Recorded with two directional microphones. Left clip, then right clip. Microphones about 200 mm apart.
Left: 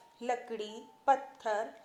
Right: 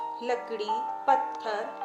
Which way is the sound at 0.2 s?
25° left (ahead or behind).